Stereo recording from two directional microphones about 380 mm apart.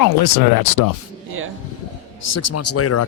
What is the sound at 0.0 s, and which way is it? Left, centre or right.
Speech, left.